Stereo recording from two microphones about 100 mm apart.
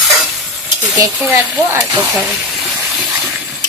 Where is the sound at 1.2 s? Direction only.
20° right (ahead or behind).